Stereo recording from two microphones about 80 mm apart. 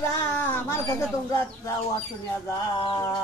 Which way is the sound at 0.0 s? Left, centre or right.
Left.